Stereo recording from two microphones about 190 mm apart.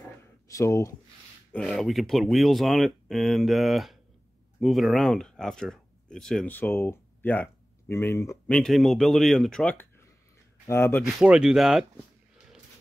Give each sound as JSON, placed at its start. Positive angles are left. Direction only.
{"t": 0.5, "sound": "speech", "side_deg": 15}
{"t": 1.5, "sound": "speech", "side_deg": 0}
{"t": 8.5, "sound": "speech", "side_deg": 0}
{"t": 11.1, "sound": "speech", "side_deg": -5}